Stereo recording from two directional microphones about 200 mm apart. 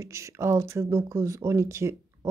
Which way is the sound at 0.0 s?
15° right (ahead or behind).